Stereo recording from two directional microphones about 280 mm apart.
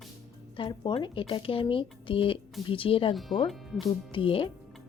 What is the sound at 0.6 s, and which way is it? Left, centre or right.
Speech, centre.